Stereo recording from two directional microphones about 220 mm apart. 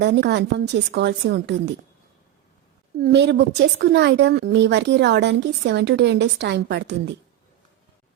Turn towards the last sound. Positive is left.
turn(degrees=-50)  # may be behind; listen again after turning